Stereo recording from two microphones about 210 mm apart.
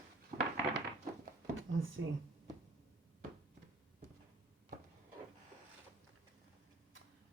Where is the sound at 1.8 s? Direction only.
70° right (ahead or behind).